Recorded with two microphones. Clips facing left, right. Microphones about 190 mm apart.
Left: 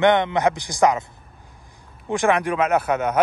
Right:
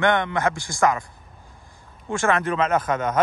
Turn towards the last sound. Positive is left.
turn(degrees=10)  # may be behind; listen again after turning